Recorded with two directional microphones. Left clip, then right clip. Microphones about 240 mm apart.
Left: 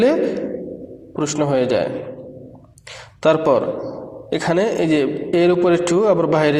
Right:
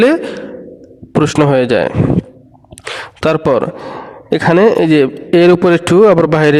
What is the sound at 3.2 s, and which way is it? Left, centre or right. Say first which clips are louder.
Speech: right 3 dB; right.